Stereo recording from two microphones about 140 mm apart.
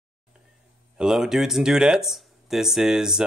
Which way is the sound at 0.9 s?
5° right (ahead or behind).